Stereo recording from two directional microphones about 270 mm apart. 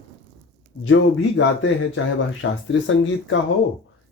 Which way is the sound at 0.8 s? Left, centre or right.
Left.